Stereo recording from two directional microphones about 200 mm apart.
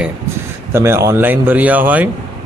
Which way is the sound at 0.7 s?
15° right (ahead or behind).